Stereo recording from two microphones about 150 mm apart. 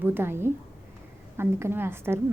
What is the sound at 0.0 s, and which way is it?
A woman's voice, 15° right (ahead or behind).